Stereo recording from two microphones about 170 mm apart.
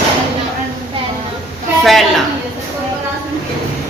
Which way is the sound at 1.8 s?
Centre (ahead or behind).